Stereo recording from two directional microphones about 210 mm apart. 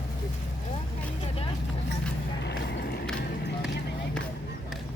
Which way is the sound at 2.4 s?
50° left (ahead or behind).